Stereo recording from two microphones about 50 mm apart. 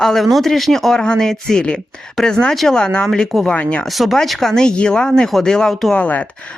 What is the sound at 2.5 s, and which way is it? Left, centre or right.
Speech, centre.